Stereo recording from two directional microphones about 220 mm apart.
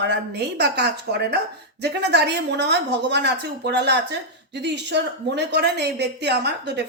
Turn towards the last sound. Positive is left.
turn(degrees=-50)  # may be behind; listen again after turning